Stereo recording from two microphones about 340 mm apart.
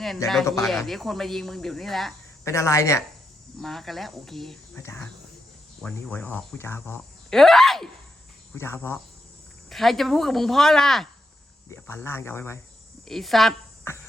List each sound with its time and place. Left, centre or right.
0.0 s a woman's voice: centre